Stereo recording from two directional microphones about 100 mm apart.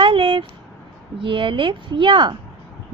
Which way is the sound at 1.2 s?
55° right (ahead or behind).